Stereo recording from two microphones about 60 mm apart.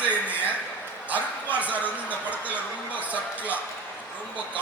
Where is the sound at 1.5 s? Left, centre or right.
Right.